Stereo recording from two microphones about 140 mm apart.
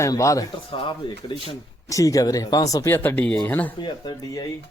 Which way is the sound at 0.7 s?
40° left (ahead or behind).